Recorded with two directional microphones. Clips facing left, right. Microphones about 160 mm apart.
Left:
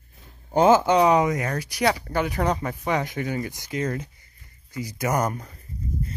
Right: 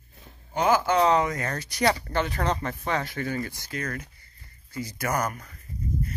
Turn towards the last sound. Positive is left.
turn(degrees=25)  # may be behind; listen again after turning